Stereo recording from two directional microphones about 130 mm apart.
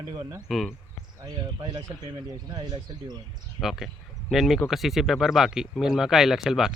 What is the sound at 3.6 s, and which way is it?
Speech, 40° left (ahead or behind).